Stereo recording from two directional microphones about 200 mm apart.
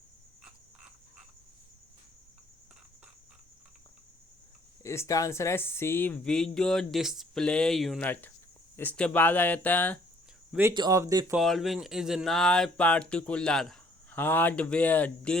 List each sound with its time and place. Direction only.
4.8 s speech: 15° left (ahead or behind)
10.5 s speech: 10° right (ahead or behind)
11.3 s speech: centre (ahead or behind)